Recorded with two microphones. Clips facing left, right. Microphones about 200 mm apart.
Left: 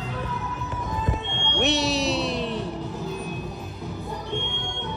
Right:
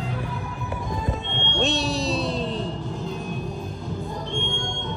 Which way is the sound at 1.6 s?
75° left (ahead or behind).